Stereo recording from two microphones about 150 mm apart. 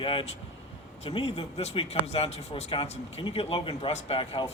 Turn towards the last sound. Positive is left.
turn(degrees=35)  # may be behind; listen again after turning